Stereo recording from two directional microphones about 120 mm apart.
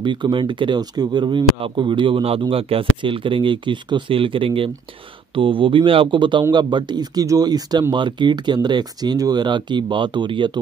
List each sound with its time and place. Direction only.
0.0 s speech: 40° right (ahead or behind)